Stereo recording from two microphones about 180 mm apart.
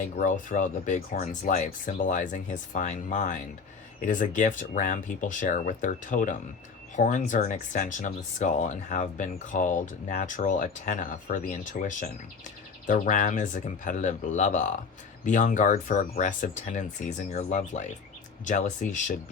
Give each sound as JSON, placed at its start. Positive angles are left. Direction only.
{"t": 0.0, "sound": "speech", "side_deg": 45}